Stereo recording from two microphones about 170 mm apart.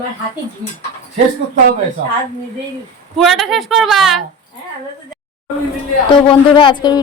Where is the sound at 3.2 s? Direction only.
Centre (ahead or behind).